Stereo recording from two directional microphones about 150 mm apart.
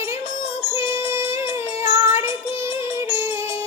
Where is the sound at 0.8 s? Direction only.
15° right (ahead or behind).